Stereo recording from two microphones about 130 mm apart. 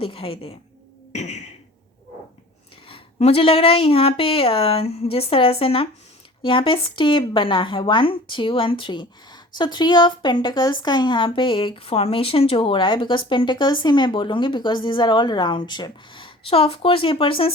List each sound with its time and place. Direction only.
0.0 s a woman's voice: 45° left (ahead or behind)
1.1 s a sound: 60° left (ahead or behind)
2.9 s a woman's voice: 50° left (ahead or behind)